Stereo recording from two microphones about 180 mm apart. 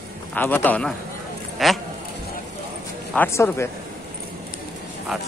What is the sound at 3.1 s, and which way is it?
Speech, 10° left (ahead or behind).